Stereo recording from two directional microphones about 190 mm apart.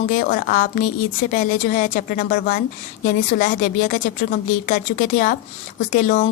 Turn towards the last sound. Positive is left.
turn(degrees=40)  # may be behind; listen again after turning